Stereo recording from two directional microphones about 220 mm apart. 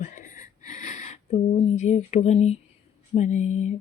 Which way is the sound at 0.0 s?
35° left (ahead or behind).